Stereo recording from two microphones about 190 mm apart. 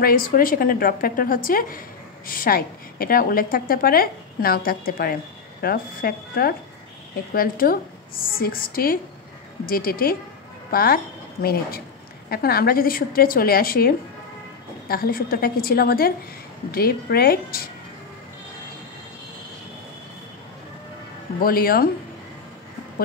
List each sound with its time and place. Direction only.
0.0 s a woman's voice: 50° left (ahead or behind)
21.4 s a woman's voice: 50° left (ahead or behind)